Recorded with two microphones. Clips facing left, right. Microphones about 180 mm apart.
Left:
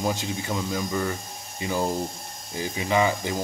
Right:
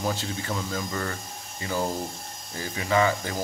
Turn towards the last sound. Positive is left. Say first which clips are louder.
# left 1 dB
turn(degrees=15)  # may be behind; listen again after turning